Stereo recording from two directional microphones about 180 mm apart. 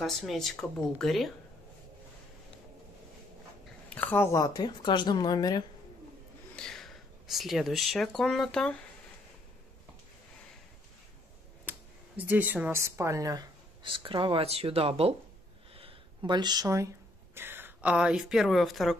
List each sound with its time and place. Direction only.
0.0 s speech: centre (ahead or behind)
3.9 s speech: 10° left (ahead or behind)
6.5 s speech: 5° left (ahead or behind)
12.2 s a woman's voice: 10° right (ahead or behind)